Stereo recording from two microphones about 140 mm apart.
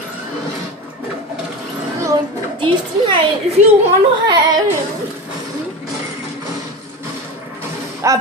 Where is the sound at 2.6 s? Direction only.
35° right (ahead or behind).